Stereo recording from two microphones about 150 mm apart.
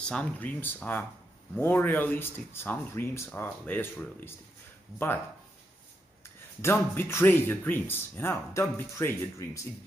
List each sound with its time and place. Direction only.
0.0 s speech: 5° left (ahead or behind)
6.2 s speech: 15° left (ahead or behind)